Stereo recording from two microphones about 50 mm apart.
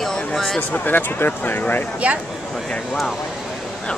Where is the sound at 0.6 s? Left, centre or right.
Left.